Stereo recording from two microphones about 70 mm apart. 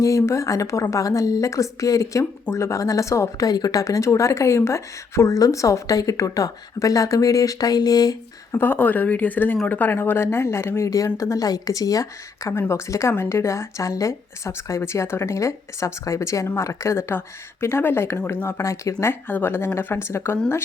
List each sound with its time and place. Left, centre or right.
0.0 s a woman's voice: left
8.5 s a woman's voice: left
12.5 s a woman's voice: left
19.3 s a woman's voice: left